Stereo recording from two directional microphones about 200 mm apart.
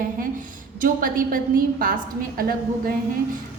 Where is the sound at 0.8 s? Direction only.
45° right (ahead or behind).